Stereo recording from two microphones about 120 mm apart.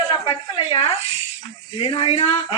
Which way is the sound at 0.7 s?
55° left (ahead or behind).